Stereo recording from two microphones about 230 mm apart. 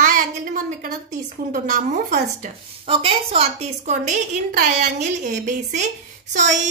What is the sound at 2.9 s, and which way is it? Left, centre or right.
A woman's voice, right.